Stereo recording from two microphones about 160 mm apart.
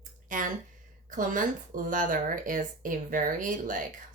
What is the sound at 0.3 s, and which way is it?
Speech, 55° right (ahead or behind).